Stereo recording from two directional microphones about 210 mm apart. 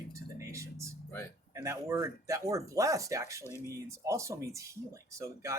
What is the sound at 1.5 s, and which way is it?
Speech, 15° right (ahead or behind).